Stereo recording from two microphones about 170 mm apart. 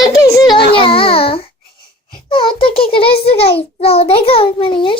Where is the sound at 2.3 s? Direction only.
30° left (ahead or behind).